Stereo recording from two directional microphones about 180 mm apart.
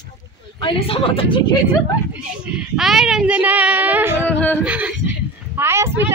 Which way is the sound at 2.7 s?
Centre (ahead or behind).